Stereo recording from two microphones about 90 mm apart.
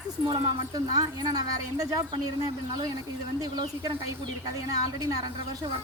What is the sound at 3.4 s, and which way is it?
Speech, 45° right (ahead or behind).